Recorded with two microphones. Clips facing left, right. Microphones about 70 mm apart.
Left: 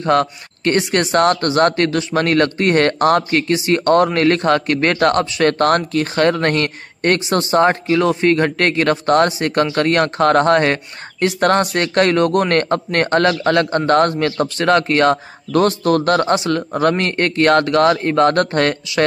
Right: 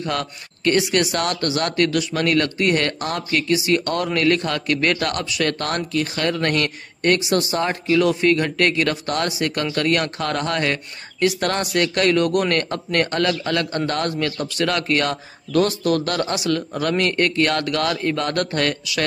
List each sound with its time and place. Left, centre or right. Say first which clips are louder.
0.0 s speech: left 10 dB; left
3.3 s speech: left 3 dB; left